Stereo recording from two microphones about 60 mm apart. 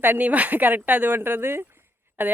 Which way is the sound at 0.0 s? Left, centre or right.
Right.